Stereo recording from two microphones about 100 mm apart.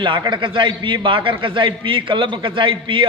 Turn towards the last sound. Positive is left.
turn(degrees=-55)  # may be behind; listen again after turning